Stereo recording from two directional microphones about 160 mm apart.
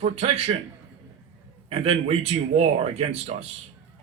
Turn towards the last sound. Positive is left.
turn(degrees=-40)  # may be behind; listen again after turning